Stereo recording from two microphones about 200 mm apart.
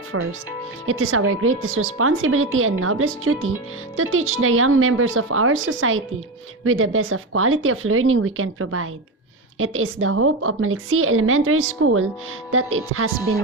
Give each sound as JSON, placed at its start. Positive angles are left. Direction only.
{"t": 0.1, "sound": "a woman's voice", "side_deg": -90}